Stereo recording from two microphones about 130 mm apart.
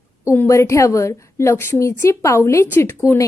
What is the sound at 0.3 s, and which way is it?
A woman's voice, 20° left (ahead or behind).